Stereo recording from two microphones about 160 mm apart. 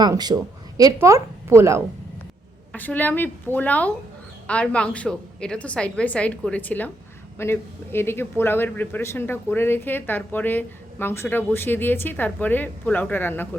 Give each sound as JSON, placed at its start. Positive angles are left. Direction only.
{"t": 0.0, "sound": "a woman's voice", "side_deg": -25}
{"t": 2.7, "sound": "speech", "side_deg": 10}